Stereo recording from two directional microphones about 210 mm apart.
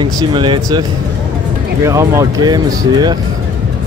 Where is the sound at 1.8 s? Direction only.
15° right (ahead or behind).